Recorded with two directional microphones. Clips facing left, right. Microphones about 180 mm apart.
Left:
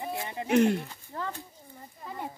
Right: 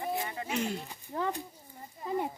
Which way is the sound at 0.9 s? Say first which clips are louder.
Right 3 dB; 15° right (ahead or behind).